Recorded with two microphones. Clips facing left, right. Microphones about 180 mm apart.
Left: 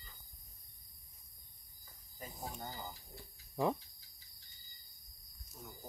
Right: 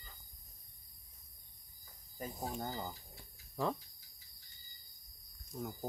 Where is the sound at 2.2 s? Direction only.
50° right (ahead or behind).